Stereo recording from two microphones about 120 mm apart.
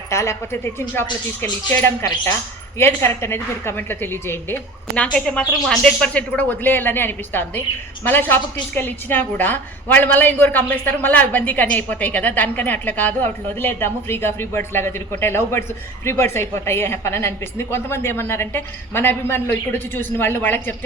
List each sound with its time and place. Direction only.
0.1 s a woman's voice: 25° left (ahead or behind)
5.1 s a woman's voice: 5° left (ahead or behind)